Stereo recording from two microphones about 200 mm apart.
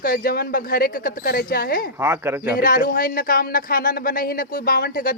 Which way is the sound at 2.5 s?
45° left (ahead or behind).